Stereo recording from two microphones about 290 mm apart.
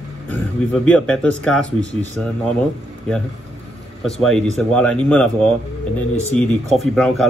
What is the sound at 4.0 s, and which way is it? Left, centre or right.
Speech, centre.